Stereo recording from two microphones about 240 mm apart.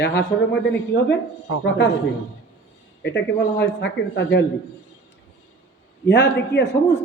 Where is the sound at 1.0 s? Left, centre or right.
Left.